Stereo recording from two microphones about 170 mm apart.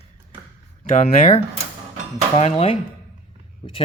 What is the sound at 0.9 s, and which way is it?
Speech, 55° left (ahead or behind).